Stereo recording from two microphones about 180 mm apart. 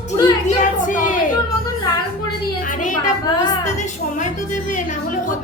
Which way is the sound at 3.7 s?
45° left (ahead or behind).